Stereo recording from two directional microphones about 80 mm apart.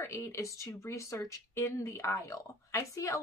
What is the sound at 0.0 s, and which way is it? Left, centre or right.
A woman's voice, left.